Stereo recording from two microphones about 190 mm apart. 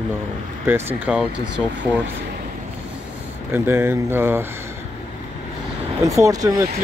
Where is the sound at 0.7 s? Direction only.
10° right (ahead or behind).